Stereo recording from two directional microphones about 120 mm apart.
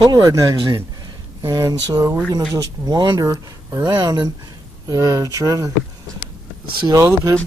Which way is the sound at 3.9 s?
35° right (ahead or behind).